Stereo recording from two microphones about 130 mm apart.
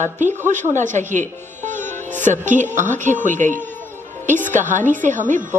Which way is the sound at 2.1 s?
70° right (ahead or behind).